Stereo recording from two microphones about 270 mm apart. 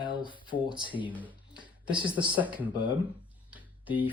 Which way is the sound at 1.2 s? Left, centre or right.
Centre.